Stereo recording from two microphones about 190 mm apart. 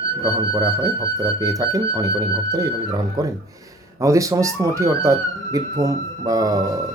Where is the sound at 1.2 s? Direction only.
20° right (ahead or behind).